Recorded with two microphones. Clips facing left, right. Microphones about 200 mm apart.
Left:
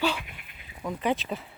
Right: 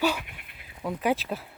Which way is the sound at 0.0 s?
10° right (ahead or behind).